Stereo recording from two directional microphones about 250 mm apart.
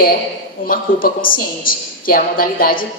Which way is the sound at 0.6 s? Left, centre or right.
Left.